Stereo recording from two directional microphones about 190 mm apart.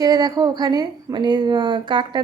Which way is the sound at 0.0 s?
20° right (ahead or behind).